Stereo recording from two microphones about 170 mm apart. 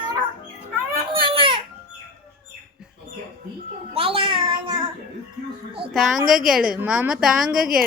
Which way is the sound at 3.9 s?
30° right (ahead or behind).